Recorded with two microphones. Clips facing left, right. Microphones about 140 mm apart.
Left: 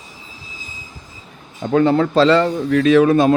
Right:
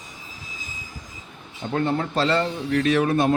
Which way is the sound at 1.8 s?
90° left.